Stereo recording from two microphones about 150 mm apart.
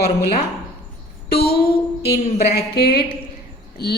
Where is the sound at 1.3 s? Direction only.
90° left.